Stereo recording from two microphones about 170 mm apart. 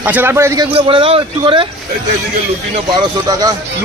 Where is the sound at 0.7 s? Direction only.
35° right (ahead or behind).